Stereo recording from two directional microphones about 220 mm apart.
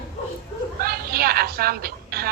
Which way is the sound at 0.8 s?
45° right (ahead or behind).